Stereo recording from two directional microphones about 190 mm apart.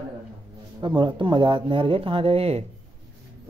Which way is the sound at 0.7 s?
25° right (ahead or behind).